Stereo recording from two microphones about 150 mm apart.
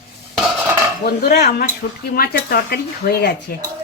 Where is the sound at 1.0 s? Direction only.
90° left.